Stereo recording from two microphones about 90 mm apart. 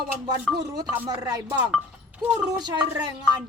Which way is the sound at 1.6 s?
15° right (ahead or behind).